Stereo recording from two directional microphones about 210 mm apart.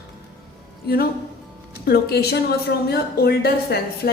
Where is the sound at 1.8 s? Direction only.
50° left (ahead or behind).